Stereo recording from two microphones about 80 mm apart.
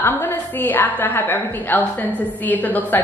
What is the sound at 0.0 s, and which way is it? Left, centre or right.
A woman's voice, left.